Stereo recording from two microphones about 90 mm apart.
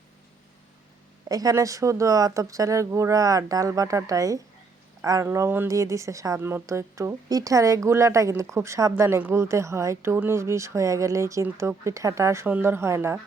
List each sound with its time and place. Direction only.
1.3 s speech: 40° right (ahead or behind)
7.3 s speech: 40° right (ahead or behind)
12.5 s a woman's voice: 20° right (ahead or behind)